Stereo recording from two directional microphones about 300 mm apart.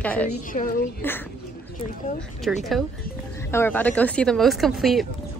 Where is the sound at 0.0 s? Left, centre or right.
Centre.